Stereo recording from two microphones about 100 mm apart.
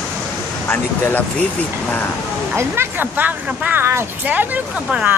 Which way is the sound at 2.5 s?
20° right (ahead or behind).